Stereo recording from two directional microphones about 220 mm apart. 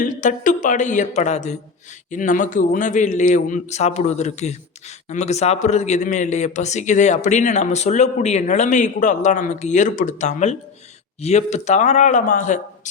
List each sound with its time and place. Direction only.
0.0 s a man's voice: 35° left (ahead or behind)